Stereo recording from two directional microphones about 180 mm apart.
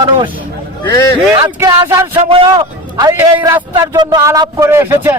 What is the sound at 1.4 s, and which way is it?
A man's voice, 20° right (ahead or behind).